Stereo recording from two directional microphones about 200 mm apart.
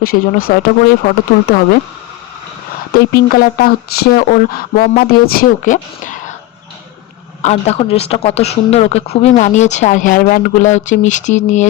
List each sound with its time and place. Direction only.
0.0 s speech: 45° left (ahead or behind)
2.9 s speech: 50° left (ahead or behind)
7.4 s speech: 30° left (ahead or behind)